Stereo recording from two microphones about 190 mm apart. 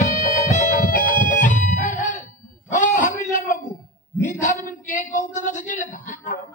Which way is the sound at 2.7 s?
40° left (ahead or behind).